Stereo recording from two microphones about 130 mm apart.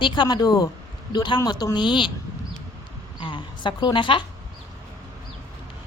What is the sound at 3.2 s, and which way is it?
Speech, 40° left (ahead or behind).